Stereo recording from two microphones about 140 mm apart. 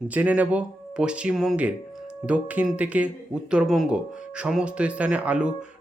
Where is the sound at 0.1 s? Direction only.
10° right (ahead or behind).